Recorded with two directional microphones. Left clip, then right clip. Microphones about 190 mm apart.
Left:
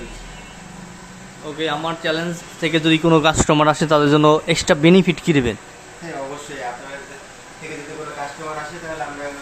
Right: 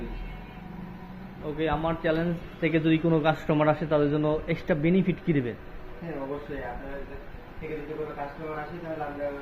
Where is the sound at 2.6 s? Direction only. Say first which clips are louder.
Left 8 dB; 45° left (ahead or behind).